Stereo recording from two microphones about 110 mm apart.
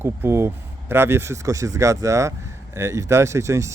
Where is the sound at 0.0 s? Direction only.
20° right (ahead or behind).